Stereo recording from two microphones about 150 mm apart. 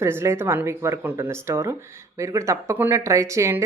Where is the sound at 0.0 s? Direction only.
20° right (ahead or behind).